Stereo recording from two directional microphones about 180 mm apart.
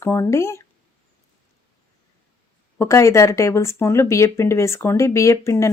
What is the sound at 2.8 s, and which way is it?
Speech, 15° left (ahead or behind).